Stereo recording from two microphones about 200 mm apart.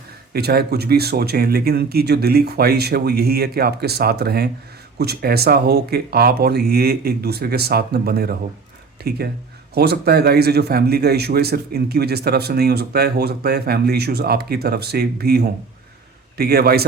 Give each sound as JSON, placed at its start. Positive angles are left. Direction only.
{"t": 0.3, "sound": "speech", "side_deg": -50}